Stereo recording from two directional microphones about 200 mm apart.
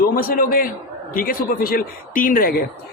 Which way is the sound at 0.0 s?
50° left (ahead or behind).